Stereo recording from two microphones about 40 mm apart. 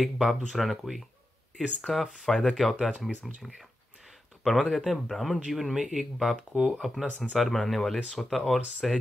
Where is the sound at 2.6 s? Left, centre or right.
Centre.